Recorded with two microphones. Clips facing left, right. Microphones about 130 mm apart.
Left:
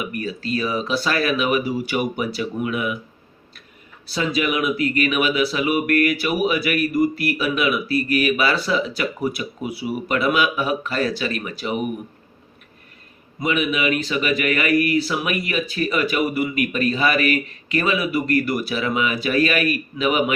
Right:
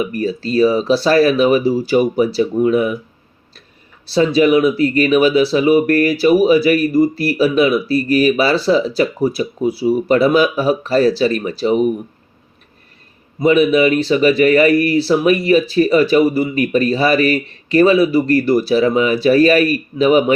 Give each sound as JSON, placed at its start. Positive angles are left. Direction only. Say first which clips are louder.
{"t": 0.0, "sound": "speech", "louder": "right 8 dB", "side_deg": -35}
{"t": 4.0, "sound": "speech", "louder": "right 10 dB", "side_deg": -30}
{"t": 13.4, "sound": "speech", "louder": "right 10 dB", "side_deg": -35}